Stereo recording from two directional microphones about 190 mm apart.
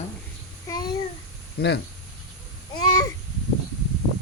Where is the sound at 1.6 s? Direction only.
55° left (ahead or behind).